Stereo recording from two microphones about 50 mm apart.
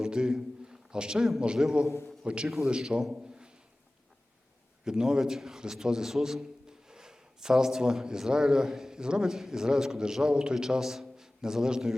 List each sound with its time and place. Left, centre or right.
0.0 s a sound: centre
1.6 s a man's voice: centre
4.9 s a man's voice: centre